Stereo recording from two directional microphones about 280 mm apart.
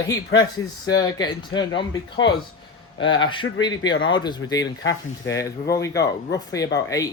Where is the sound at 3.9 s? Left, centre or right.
Left.